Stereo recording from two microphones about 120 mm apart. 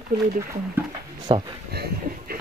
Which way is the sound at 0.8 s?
20° right (ahead or behind).